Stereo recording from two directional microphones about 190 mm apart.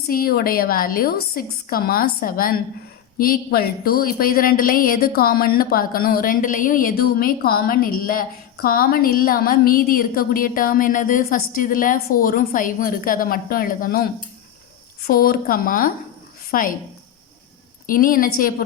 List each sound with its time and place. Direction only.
0.1 s a woman's voice: 50° left (ahead or behind)
17.8 s a woman's voice: 45° left (ahead or behind)